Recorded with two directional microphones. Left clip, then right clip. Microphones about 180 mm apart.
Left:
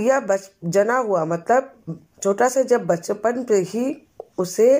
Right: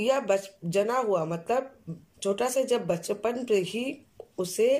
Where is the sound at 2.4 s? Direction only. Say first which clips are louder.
Left 9 dB; 15° right (ahead or behind).